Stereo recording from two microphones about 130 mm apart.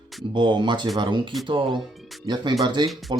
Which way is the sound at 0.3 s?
35° right (ahead or behind).